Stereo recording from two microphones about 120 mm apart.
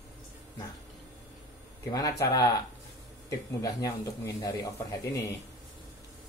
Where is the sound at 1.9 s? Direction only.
30° left (ahead or behind).